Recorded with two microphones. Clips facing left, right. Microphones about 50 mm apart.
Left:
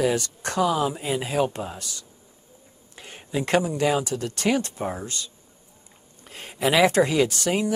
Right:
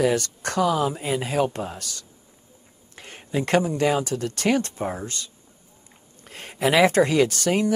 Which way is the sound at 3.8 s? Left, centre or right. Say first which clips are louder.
Right 1 dB; right.